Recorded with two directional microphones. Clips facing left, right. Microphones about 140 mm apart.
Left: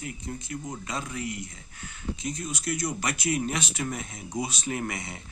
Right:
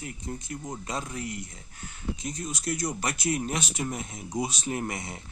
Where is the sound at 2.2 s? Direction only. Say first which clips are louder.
Left 1 dB; 40° right (ahead or behind).